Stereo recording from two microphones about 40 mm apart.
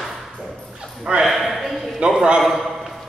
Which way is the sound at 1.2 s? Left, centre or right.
Centre.